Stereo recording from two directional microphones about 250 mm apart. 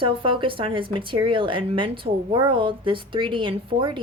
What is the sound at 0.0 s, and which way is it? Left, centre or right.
Speech, right.